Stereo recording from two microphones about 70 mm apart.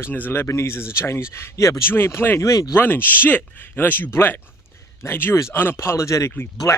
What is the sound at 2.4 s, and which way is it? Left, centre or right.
Speech, left.